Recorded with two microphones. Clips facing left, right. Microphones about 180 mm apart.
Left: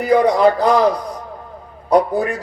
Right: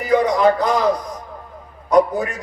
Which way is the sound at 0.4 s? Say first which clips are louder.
Left 3 dB; 35° left (ahead or behind).